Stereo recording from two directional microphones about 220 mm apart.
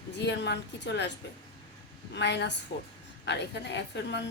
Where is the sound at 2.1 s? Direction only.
50° left (ahead or behind).